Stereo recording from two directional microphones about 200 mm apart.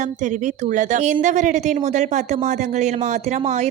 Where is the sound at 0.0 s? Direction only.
40° right (ahead or behind).